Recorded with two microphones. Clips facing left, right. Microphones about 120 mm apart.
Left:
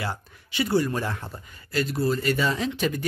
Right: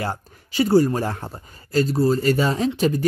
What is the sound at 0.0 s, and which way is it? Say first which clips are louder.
Speech: right 4 dB; 40° right (ahead or behind).